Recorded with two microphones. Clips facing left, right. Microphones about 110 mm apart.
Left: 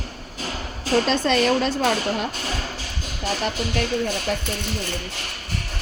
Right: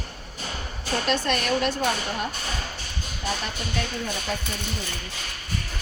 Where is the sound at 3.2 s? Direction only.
90° left.